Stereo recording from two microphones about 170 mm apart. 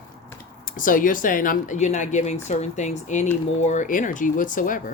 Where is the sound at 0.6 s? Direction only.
55° left (ahead or behind).